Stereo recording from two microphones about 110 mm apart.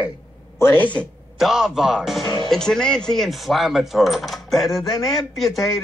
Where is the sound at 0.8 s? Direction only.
10° left (ahead or behind).